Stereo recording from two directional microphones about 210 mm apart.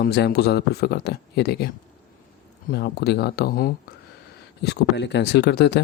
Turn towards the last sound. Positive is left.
turn(degrees=55)  # may be behind; listen again after turning